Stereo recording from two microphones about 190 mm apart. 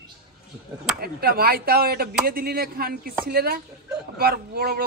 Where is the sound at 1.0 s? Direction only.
55° right (ahead or behind).